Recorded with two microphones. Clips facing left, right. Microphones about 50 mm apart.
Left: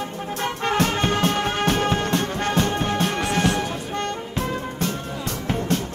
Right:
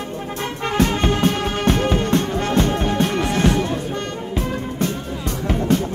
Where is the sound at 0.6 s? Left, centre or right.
Centre.